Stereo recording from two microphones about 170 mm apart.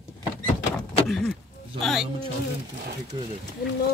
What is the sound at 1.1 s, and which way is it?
Speech, centre (ahead or behind).